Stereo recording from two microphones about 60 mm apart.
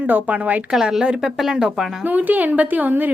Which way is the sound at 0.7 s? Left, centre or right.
Centre.